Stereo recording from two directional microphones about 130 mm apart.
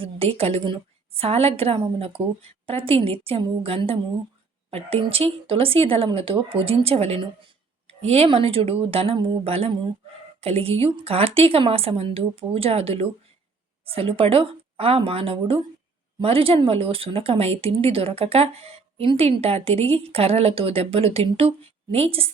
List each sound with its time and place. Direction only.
0.0 s speech: 45° right (ahead or behind)